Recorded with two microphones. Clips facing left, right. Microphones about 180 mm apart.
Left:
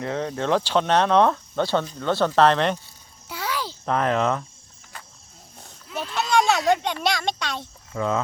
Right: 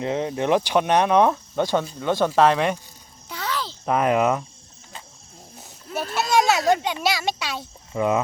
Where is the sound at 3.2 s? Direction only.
10° left (ahead or behind).